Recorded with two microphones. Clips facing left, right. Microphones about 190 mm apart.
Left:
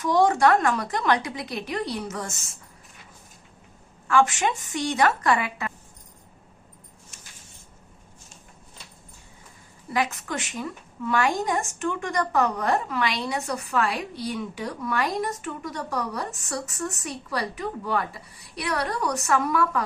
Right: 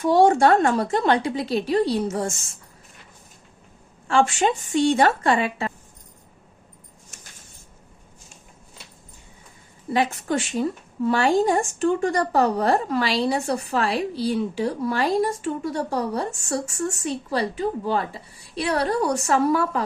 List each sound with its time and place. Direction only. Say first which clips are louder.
0.0 s a woman's voice: right 4 dB; 30° right (ahead or behind)
4.0 s a woman's voice: right 2 dB; 30° right (ahead or behind)
9.9 s a woman's voice: right 5 dB; 30° right (ahead or behind)